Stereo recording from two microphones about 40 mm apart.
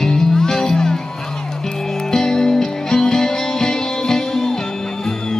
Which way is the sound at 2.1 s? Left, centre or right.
Centre.